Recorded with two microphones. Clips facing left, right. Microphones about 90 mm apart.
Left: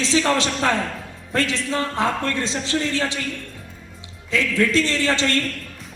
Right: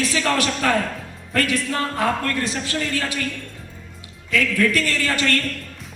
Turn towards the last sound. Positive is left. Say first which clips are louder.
# left 1 dB
turn(degrees=25)  # may be behind; listen again after turning